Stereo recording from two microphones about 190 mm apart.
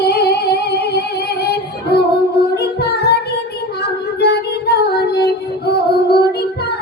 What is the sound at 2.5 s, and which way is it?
Music, 60° left (ahead or behind).